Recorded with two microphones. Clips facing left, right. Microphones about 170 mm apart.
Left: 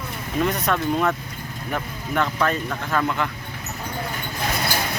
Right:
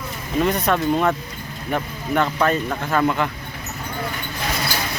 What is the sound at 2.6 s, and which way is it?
Speech, 15° right (ahead or behind).